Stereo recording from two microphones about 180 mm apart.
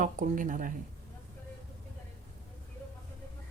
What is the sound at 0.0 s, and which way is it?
Speech, 45° right (ahead or behind).